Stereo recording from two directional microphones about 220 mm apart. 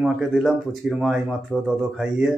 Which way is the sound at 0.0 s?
Centre (ahead or behind).